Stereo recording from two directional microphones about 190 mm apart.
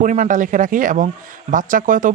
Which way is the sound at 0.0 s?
45° right (ahead or behind).